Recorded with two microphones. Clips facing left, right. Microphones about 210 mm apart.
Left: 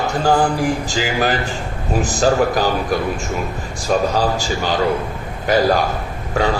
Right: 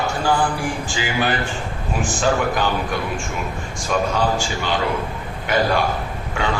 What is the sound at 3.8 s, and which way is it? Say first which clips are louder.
A man's voice: left 3 dB; 35° left (ahead or behind).